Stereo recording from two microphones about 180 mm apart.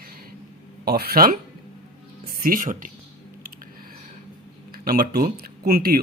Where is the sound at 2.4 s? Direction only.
50° right (ahead or behind).